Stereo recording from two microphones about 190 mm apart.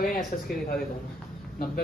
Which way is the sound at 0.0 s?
50° left (ahead or behind).